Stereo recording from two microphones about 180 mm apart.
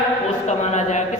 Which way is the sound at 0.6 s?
40° left (ahead or behind).